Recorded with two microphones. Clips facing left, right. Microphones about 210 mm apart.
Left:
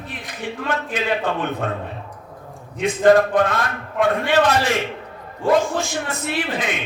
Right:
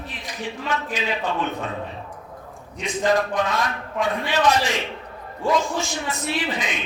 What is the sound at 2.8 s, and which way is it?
Speech, 55° left (ahead or behind).